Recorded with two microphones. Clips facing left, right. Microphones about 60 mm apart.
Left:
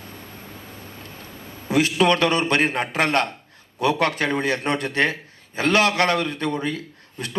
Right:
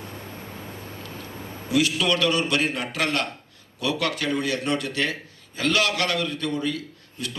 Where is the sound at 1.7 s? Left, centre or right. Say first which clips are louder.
Left 4 dB; left.